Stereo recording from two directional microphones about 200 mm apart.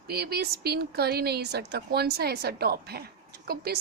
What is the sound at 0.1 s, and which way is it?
A woman's voice, 50° right (ahead or behind).